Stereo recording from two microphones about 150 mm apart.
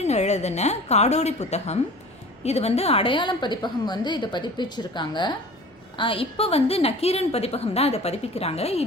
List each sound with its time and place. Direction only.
0.0 s a woman's voice: 45° left (ahead or behind)